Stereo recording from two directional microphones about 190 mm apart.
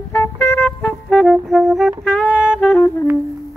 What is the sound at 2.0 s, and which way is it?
Saxophone, 5° left (ahead or behind).